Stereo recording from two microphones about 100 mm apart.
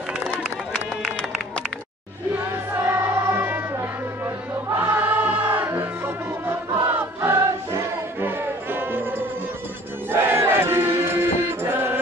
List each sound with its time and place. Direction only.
2.7 s music: 25° right (ahead or behind)
4.7 s choir: 20° right (ahead or behind)
5.7 s music: 20° right (ahead or behind)
10.2 s battle cry: 25° right (ahead or behind)
11.6 s music: 20° right (ahead or behind)